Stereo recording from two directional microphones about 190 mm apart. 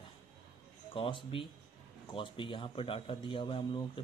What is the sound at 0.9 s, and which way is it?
Speech, 25° left (ahead or behind).